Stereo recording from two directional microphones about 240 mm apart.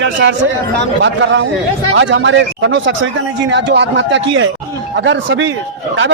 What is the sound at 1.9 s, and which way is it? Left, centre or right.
A man's voice, right.